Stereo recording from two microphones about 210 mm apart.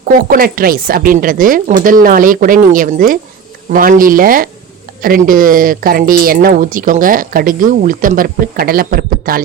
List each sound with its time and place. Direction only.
0.0 s speech: 45° right (ahead or behind)